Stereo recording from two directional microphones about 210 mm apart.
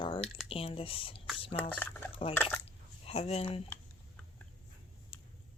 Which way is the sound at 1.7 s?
10° left (ahead or behind).